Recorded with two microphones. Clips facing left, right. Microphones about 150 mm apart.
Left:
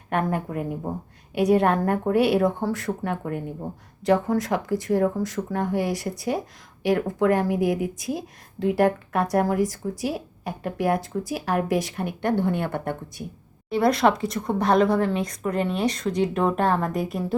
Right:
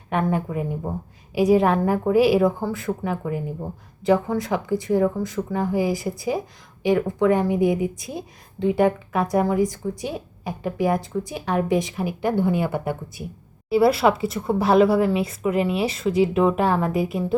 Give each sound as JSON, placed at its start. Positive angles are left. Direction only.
{"t": 0.1, "sound": "speech", "side_deg": 0}